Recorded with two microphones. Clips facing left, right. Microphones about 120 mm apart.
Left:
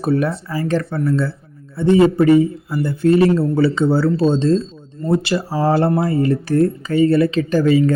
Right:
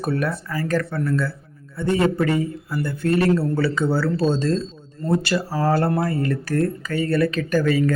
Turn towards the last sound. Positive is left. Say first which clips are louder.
# left 5 dB
turn(degrees=25)  # may be behind; listen again after turning